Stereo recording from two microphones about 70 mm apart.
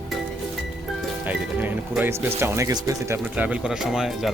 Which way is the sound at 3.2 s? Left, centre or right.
Right.